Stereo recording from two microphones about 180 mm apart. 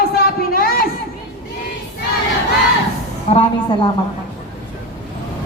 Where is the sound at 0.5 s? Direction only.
55° left (ahead or behind).